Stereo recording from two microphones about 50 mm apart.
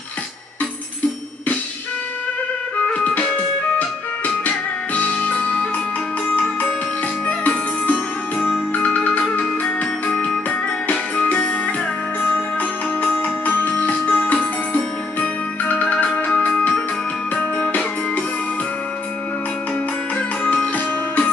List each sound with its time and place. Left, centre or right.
2.9 s music: left
7.2 s music: left
11.2 s music: left